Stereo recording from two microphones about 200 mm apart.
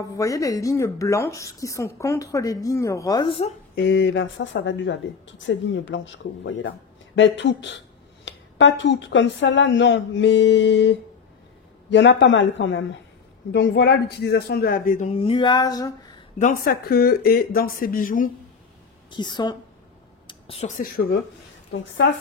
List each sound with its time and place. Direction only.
0.2 s a woman's voice: 15° left (ahead or behind)
3.7 s speech: 60° left (ahead or behind); by 15.9 s 20° left (ahead or behind)
16.3 s speech: 45° left (ahead or behind)
19.0 s a woman's voice: 20° left (ahead or behind)
20.2 s a sound: 30° left (ahead or behind)
20.8 s speech: 50° left (ahead or behind)